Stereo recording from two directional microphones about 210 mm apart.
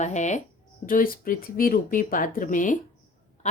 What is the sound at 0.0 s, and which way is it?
A woman's voice, 35° left (ahead or behind).